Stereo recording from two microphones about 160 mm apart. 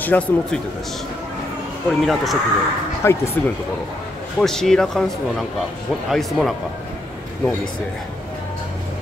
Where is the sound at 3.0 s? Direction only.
15° left (ahead or behind).